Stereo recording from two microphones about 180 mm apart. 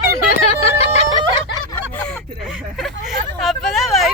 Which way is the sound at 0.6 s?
35° left (ahead or behind).